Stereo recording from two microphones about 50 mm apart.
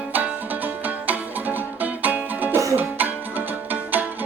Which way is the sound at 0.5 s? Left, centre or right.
Right.